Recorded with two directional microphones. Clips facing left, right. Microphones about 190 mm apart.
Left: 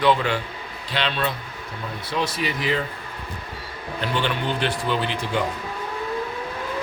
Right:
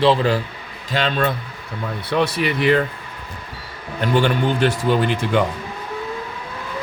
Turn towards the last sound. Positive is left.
turn(degrees=-50)  # may be behind; listen again after turning